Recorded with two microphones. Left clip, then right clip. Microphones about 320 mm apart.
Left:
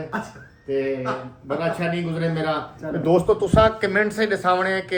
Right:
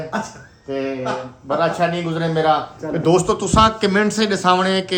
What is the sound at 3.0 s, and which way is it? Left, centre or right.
Speech, right.